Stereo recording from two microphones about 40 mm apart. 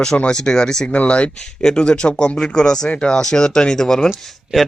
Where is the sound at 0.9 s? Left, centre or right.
Left; by 4.1 s centre.